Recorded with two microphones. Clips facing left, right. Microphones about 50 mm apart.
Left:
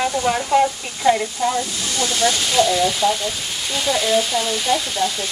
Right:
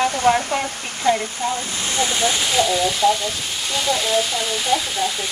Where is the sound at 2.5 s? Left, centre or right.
Centre.